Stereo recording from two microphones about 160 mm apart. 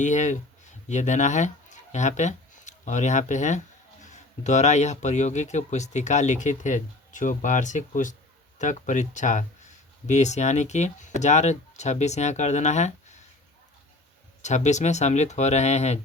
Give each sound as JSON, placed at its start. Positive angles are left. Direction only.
{"t": 0.0, "sound": "speech", "side_deg": 50}
{"t": 14.4, "sound": "speech", "side_deg": 45}